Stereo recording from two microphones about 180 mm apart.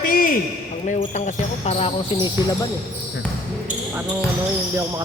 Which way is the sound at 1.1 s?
40° left (ahead or behind).